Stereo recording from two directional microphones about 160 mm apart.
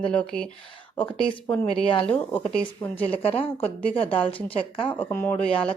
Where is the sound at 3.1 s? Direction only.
35° left (ahead or behind).